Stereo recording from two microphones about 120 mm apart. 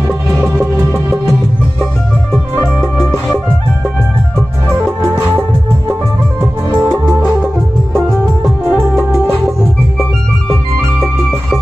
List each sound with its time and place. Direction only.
0.4 s music: 15° right (ahead or behind)
6.8 s music: 15° right (ahead or behind)
7.4 s music: centre (ahead or behind)